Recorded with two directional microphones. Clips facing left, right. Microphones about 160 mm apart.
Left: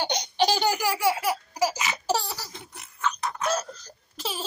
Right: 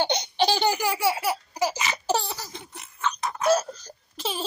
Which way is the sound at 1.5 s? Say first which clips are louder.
Even; 5° left (ahead or behind).